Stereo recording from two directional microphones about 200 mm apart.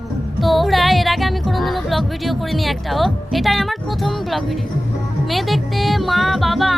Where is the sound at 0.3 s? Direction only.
Centre (ahead or behind).